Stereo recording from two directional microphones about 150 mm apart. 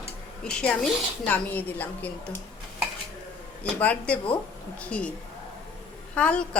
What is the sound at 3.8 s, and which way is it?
A woman's voice, 10° left (ahead or behind).